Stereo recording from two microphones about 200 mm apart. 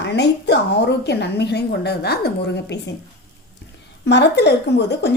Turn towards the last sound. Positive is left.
turn(degrees=55)  # may be behind; listen again after turning